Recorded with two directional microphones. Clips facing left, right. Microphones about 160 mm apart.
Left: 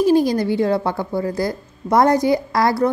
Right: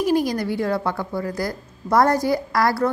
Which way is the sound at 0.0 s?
30° left (ahead or behind).